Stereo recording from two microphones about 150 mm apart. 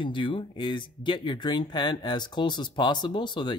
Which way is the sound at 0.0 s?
30° left (ahead or behind).